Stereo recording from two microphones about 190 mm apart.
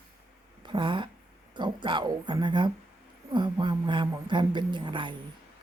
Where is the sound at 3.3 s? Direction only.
25° right (ahead or behind).